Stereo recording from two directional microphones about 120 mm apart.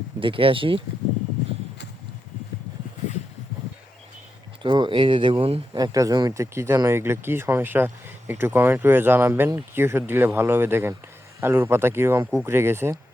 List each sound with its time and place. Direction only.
0.2 s speech: 45° right (ahead or behind)
4.6 s speech: 40° right (ahead or behind)
5.7 s speech: 30° right (ahead or behind)